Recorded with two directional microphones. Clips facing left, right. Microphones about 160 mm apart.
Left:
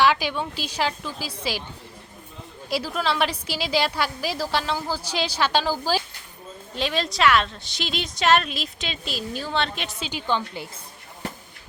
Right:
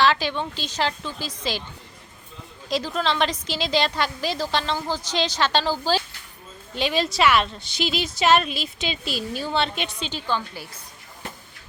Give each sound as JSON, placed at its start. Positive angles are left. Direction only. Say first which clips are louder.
{"t": 0.0, "sound": "a woman's voice", "louder": "even", "side_deg": 10}
{"t": 2.6, "sound": "a woman's voice", "louder": "right 1 dB", "side_deg": 10}
{"t": 6.7, "sound": "a woman's voice", "louder": "right 2 dB", "side_deg": 0}
{"t": 10.1, "sound": "a woman's voice", "louder": "left 5 dB", "side_deg": 15}